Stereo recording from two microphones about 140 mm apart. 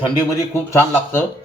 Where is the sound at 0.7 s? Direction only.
15° left (ahead or behind).